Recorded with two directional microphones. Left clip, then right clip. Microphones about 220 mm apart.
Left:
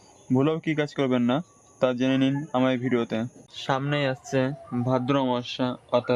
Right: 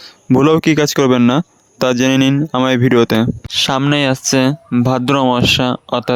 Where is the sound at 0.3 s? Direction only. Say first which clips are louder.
Right 13 dB; 40° right (ahead or behind).